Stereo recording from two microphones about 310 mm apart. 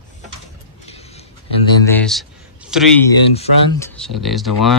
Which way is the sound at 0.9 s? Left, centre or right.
Centre.